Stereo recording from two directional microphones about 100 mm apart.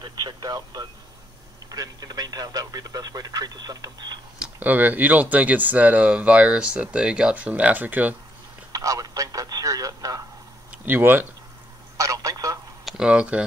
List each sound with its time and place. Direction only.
0.0 s speech: 45° right (ahead or behind)
4.6 s speech: 20° right (ahead or behind)
8.7 s speech: 35° right (ahead or behind)
10.7 s speech: 20° right (ahead or behind)
12.0 s telephone: 35° right (ahead or behind)
12.8 s speech: 5° right (ahead or behind)